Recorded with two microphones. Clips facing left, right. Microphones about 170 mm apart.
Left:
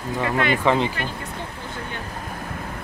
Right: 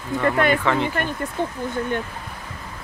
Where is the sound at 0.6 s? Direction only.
15° left (ahead or behind).